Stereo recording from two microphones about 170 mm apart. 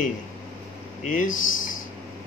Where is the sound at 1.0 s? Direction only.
50° left (ahead or behind).